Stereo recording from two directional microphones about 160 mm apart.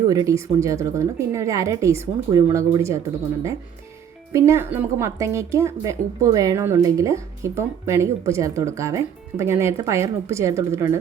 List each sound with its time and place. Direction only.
0.1 s a woman's voice: 20° right (ahead or behind)
4.3 s a woman's voice: 20° right (ahead or behind)